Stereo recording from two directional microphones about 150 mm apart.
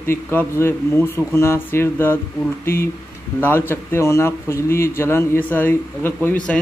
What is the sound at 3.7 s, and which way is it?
A man's voice, 15° left (ahead or behind).